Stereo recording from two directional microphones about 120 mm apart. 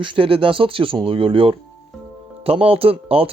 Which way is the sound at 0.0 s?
45° right (ahead or behind).